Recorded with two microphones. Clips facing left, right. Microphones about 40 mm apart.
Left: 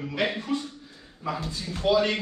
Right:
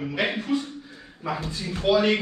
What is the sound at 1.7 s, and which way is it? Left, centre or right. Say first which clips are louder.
Speech: right 2 dB; centre.